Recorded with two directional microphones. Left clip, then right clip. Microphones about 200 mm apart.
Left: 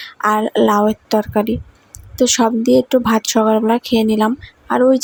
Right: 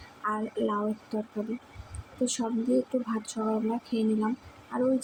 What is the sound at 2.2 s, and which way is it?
Speech, 45° left (ahead or behind).